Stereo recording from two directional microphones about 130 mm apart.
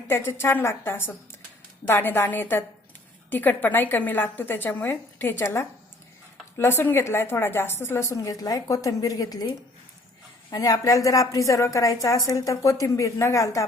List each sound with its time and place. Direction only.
0.1 s a woman's voice: 20° left (ahead or behind)